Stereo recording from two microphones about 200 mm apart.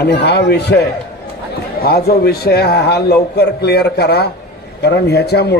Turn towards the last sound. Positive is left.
turn(degrees=55)  # may be behind; listen again after turning